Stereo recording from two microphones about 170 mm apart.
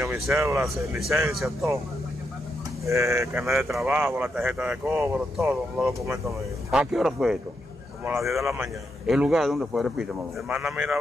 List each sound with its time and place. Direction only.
0.1 s speech: 15° right (ahead or behind)
1.3 s speech: centre (ahead or behind)
2.9 s speech: 15° right (ahead or behind)